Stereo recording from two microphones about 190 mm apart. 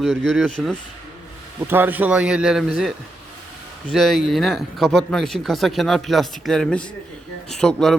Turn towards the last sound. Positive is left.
turn(degrees=0)  # may be behind; listen again after turning